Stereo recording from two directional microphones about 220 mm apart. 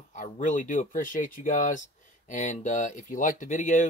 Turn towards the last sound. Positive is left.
turn(degrees=35)  # may be behind; listen again after turning